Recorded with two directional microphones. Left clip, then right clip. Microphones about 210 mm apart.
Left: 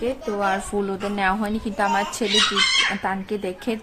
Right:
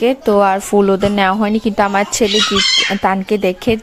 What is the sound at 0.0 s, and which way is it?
A woman's voice, 45° right (ahead or behind).